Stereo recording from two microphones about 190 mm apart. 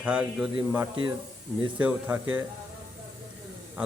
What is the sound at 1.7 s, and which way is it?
Speech, 10° right (ahead or behind).